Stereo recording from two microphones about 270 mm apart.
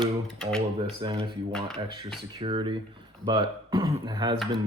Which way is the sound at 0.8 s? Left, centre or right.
Centre.